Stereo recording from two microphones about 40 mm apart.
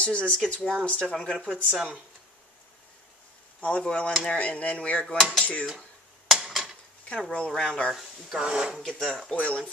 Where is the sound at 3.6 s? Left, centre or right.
Left.